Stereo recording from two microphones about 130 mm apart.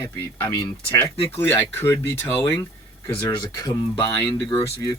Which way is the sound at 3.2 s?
25° left (ahead or behind).